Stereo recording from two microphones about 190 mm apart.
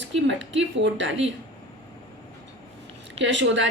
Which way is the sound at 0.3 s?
70° right (ahead or behind).